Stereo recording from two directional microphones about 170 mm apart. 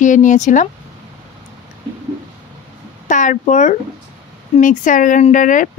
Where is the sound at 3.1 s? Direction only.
45° left (ahead or behind).